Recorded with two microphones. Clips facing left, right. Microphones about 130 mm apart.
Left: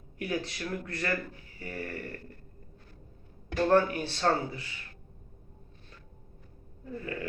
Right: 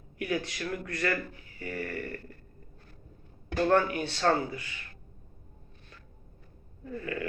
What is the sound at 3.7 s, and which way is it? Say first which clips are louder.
Speech: left 1 dB; 35° left (ahead or behind).